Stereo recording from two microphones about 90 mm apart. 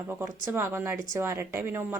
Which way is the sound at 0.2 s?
30° right (ahead or behind).